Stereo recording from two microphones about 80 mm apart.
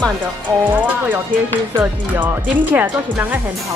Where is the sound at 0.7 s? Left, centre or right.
Right.